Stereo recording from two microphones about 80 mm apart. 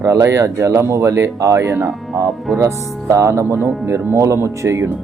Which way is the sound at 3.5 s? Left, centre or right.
Right.